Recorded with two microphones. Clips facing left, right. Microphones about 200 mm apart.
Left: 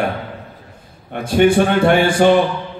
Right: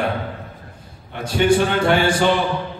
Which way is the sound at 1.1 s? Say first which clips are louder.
Left 4 dB; 50° left (ahead or behind).